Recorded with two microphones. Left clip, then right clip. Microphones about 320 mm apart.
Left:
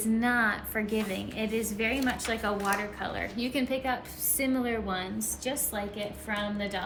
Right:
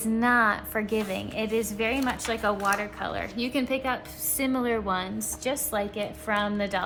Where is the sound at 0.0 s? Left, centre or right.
Centre.